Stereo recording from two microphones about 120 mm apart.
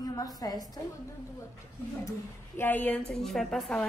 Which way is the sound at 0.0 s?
30° left (ahead or behind).